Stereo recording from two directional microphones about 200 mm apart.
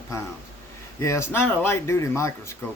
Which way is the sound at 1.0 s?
15° left (ahead or behind).